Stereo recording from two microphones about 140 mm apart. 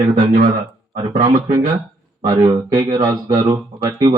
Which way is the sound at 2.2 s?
25° right (ahead or behind).